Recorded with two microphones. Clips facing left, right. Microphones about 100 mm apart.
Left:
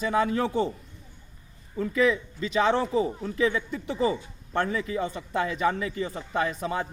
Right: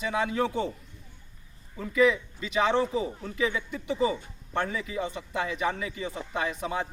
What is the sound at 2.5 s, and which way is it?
A man's voice, 35° left (ahead or behind).